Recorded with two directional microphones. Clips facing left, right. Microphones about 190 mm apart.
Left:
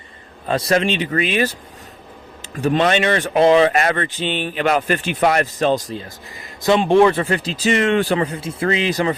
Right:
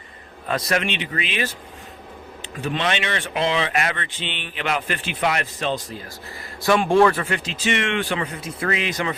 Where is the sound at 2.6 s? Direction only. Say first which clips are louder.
Left 8 dB; 40° left (ahead or behind).